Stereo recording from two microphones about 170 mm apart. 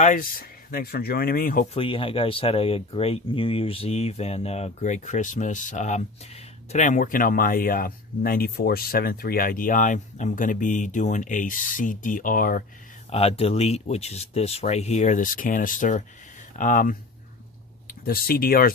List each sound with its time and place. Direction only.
0.0 s speech: 55° left (ahead or behind)
1.7 s speech: 30° left (ahead or behind); by 12.6 s 55° left (ahead or behind)
13.1 s speech: 35° left (ahead or behind); by 17.0 s 55° left (ahead or behind)
18.0 s speech: 60° left (ahead or behind)